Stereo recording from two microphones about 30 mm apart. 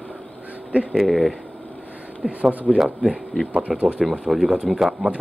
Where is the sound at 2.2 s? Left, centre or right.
Right.